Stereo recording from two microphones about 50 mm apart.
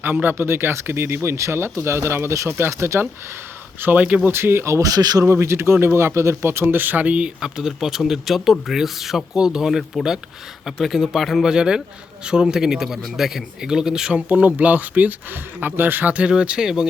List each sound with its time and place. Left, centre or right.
0.0 s speech: right
0.3 s speech: right
2.5 s speech: right
3.9 s speech: right
4.3 s speech: right
6.7 s speech: right
7.4 s speech: centre
11.4 s speech: centre
14.1 s speech: right
15.6 s speech: right
16.3 s speech: centre